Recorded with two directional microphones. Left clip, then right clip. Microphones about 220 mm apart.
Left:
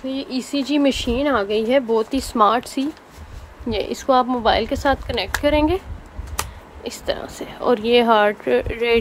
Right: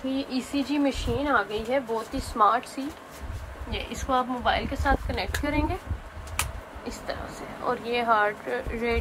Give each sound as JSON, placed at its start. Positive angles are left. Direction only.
{"t": 0.1, "sound": "speech", "side_deg": 15}
{"t": 3.7, "sound": "speech", "side_deg": 25}
{"t": 6.8, "sound": "speech", "side_deg": 40}